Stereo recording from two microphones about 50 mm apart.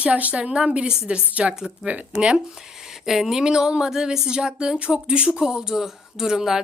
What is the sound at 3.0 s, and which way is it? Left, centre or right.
Speech, centre.